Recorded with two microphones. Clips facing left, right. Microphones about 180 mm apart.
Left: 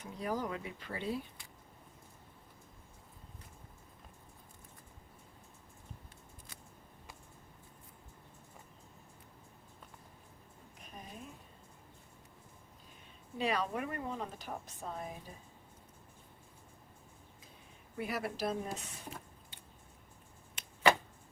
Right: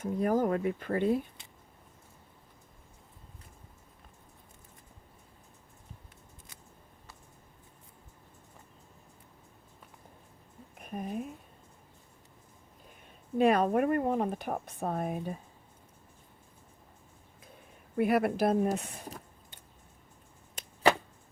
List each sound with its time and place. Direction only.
0.0 s speech: 50° right (ahead or behind)
10.8 s speech: 55° right (ahead or behind)
13.4 s speech: 50° right (ahead or behind)
17.9 s speech: 55° right (ahead or behind)